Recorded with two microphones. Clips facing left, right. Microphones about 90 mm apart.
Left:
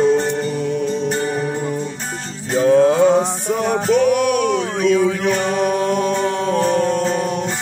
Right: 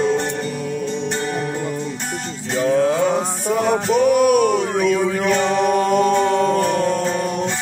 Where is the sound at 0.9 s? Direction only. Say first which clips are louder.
Left 3 dB; 40° left (ahead or behind).